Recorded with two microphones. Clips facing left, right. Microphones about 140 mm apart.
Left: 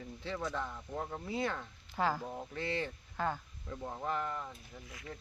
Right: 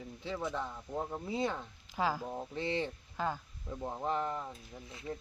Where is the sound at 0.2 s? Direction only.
15° right (ahead or behind).